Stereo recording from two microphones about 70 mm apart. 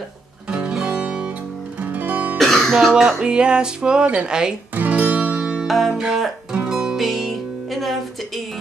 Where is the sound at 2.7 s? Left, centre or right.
Centre.